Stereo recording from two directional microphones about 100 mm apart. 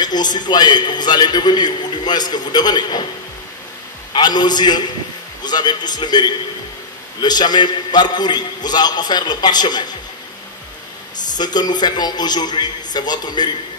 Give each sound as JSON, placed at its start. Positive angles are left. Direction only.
{"t": 0.0, "sound": "a man's voice", "side_deg": 45}
{"t": 4.1, "sound": "a man's voice", "side_deg": 45}
{"t": 11.3, "sound": "a man's voice", "side_deg": 45}